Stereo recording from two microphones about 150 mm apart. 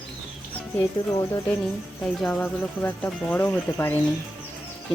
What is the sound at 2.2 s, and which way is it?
Speech, 10° left (ahead or behind).